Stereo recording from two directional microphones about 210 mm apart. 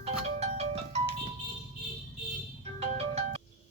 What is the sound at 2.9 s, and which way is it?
Music, 30° right (ahead or behind).